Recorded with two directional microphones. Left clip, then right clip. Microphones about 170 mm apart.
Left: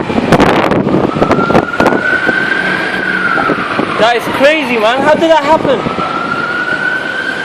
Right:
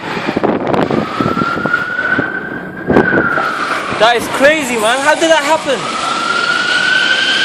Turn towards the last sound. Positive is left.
turn(degrees=25)  # may be behind; listen again after turning